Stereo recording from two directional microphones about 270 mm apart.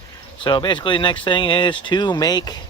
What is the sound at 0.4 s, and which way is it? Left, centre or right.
Speech, centre.